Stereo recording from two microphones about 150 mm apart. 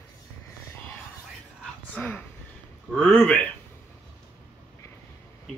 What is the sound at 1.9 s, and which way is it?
Speech, 15° left (ahead or behind).